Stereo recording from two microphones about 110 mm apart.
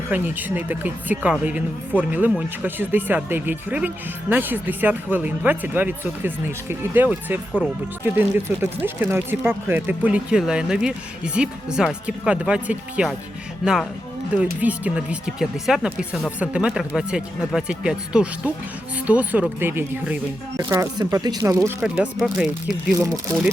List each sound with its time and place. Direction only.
0.1 s speech: 15° right (ahead or behind)
14.3 s speech: 10° right (ahead or behind)
20.6 s speech: 30° right (ahead or behind)
21.8 s speech: 10° right (ahead or behind)